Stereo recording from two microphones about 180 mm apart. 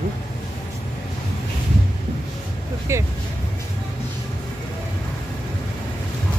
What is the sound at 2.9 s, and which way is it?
Speech, 15° right (ahead or behind).